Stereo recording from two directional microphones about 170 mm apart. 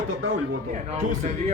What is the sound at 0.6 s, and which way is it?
Speech, 45° right (ahead or behind).